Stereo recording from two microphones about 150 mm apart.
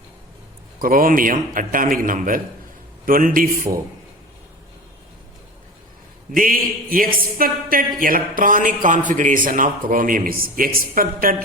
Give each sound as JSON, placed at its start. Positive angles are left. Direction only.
{"t": 0.8, "sound": "a man's voice", "side_deg": -70}
{"t": 6.3, "sound": "a man's voice", "side_deg": -70}